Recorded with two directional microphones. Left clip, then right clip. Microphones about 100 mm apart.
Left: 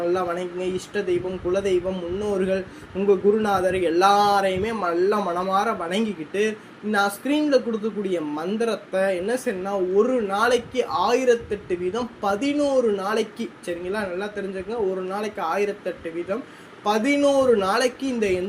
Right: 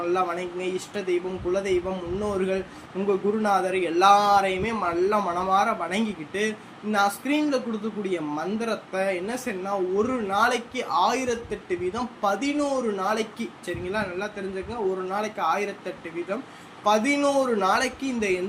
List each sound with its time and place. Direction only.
0.1 s speech: 30° left (ahead or behind)
16.8 s speech: 25° left (ahead or behind)